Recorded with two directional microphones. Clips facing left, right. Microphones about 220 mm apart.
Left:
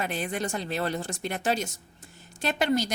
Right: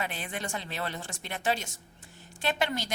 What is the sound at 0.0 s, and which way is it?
A woman's voice, 45° left (ahead or behind).